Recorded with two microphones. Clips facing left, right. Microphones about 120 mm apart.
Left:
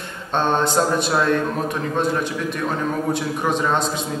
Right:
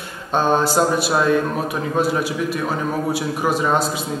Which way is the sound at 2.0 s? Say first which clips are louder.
Right 3 dB; 5° right (ahead or behind).